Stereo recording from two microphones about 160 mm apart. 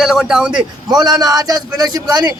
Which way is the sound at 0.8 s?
25° right (ahead or behind).